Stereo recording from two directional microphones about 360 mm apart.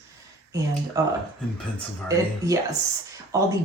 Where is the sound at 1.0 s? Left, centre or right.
Centre.